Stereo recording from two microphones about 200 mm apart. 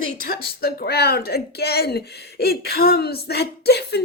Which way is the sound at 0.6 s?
50° left (ahead or behind).